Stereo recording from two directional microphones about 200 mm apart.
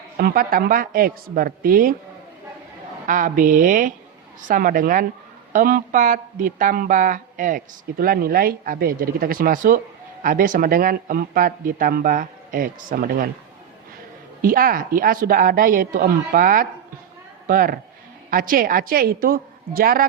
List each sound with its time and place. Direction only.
0.2 s speech: 50° right (ahead or behind)
3.1 s a woman's voice: 40° right (ahead or behind)
14.4 s speech: 45° right (ahead or behind)